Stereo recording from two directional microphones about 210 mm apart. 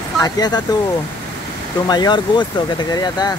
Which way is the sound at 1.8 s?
20° left (ahead or behind).